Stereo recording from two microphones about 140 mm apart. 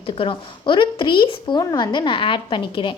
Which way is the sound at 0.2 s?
35° left (ahead or behind).